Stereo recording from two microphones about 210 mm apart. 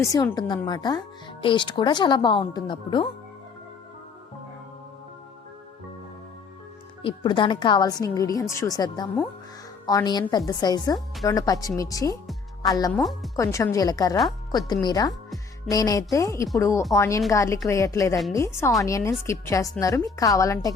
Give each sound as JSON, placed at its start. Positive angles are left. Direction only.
{"t": 0.0, "sound": "speech", "side_deg": 15}
{"t": 7.0, "sound": "a woman's voice", "side_deg": 20}
{"t": 12.9, "sound": "speech", "side_deg": 0}
{"t": 13.3, "sound": "a woman's voice", "side_deg": 15}